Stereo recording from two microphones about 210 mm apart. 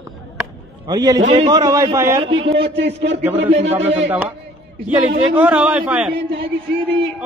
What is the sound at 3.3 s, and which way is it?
Speech, 30° right (ahead or behind).